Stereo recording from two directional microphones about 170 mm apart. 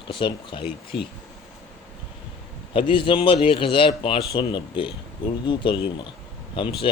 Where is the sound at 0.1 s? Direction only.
30° left (ahead or behind).